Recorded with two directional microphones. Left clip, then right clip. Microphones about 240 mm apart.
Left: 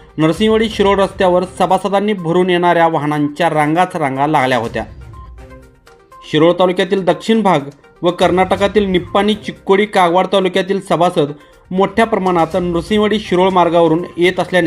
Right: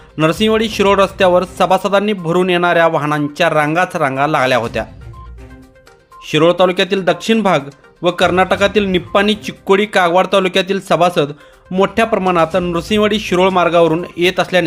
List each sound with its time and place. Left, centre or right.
0.2 s speech: centre
6.2 s speech: centre